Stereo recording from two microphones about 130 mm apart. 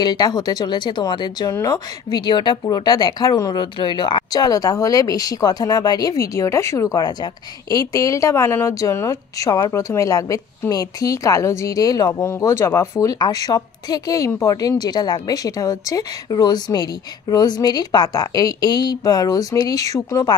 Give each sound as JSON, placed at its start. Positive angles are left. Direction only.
{"t": 0.0, "sound": "speech", "side_deg": 30}
{"t": 1.5, "sound": "speech", "side_deg": 25}